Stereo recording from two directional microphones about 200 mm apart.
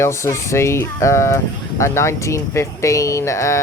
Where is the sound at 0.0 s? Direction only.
15° left (ahead or behind).